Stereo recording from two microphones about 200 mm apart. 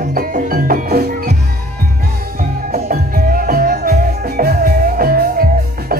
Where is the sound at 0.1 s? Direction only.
45° right (ahead or behind).